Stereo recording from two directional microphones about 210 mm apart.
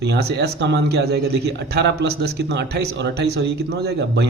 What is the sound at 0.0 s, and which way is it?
A man's voice, 50° right (ahead or behind).